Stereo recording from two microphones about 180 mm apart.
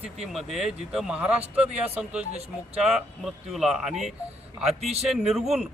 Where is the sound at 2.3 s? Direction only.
35° right (ahead or behind).